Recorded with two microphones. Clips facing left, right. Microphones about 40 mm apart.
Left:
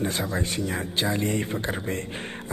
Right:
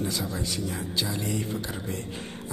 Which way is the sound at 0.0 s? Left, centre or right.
Left.